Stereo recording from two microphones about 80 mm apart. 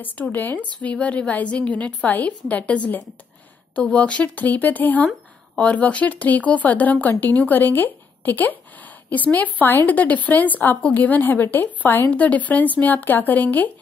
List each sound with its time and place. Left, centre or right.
0.0 s a woman's voice: left